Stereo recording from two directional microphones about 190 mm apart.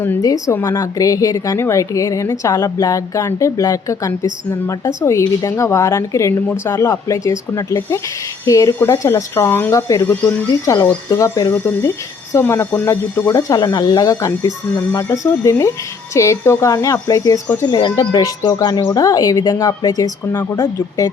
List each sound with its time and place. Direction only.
0.0 s a woman's voice: 15° left (ahead or behind)